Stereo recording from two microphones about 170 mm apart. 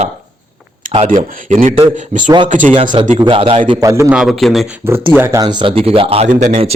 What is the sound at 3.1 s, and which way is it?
Speech, 30° right (ahead or behind).